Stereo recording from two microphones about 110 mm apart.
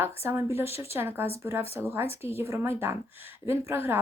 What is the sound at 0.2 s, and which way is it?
A woman's voice, 20° right (ahead or behind).